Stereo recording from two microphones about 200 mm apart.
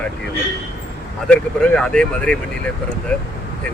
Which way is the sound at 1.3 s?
5° left (ahead or behind).